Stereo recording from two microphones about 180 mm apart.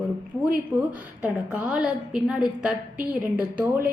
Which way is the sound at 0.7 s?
15° right (ahead or behind).